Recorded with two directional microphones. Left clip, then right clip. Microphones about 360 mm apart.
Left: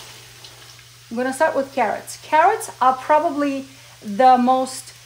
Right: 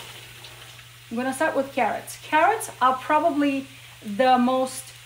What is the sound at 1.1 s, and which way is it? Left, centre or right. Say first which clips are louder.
Speech: left 5 dB; left.